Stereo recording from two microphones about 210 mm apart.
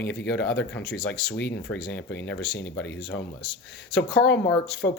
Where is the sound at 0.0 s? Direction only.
55° left (ahead or behind).